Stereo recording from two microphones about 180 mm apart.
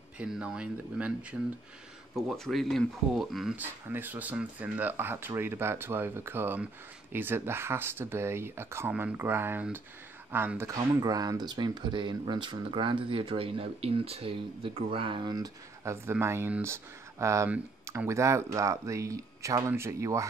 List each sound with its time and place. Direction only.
0.2 s speech: 5° right (ahead or behind)